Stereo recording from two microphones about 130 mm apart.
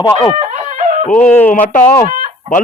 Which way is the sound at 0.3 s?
50° right (ahead or behind).